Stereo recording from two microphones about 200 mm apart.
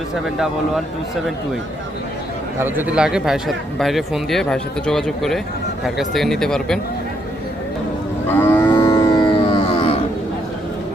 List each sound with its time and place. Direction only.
2.6 s speech: 10° right (ahead or behind)
8.3 s moo: 10° left (ahead or behind)
8.8 s music: 15° left (ahead or behind)